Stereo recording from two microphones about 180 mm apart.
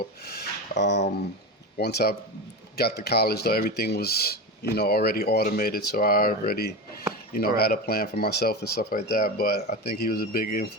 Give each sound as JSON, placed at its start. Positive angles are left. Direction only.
{"t": 0.0, "sound": "speech", "side_deg": 60}
{"t": 0.8, "sound": "a sound", "side_deg": 70}
{"t": 1.8, "sound": "speech", "side_deg": 65}